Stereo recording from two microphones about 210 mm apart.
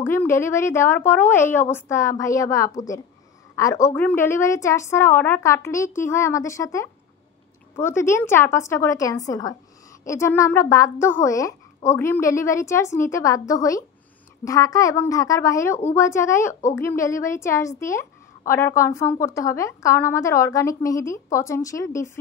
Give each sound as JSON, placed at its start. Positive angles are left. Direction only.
{"t": 0.0, "sound": "a woman's voice", "side_deg": 10}